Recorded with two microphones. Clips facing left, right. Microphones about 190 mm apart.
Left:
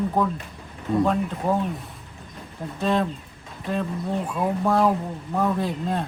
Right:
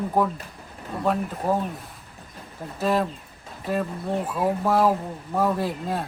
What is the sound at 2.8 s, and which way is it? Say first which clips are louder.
Speech: even; 5° right (ahead or behind).